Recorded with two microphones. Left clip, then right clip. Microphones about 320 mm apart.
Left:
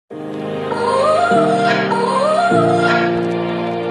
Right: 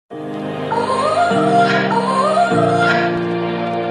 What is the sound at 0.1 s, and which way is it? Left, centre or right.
Music, centre.